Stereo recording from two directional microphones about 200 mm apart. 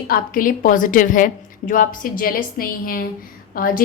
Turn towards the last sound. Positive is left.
turn(degrees=45)  # may be behind; listen again after turning